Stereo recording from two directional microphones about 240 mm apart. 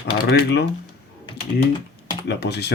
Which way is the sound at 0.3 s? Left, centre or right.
Left.